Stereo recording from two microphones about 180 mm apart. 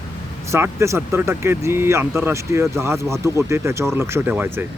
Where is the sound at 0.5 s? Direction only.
15° right (ahead or behind).